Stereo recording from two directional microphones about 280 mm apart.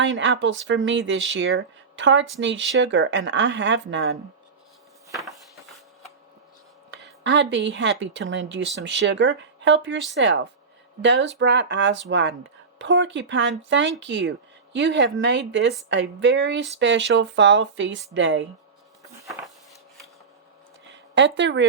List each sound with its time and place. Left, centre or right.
0.0 s speech: right
5.1 s a sound: centre
6.9 s speech: right
20.9 s speech: right